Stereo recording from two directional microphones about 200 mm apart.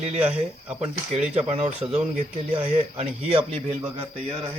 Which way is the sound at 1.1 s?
30° right (ahead or behind).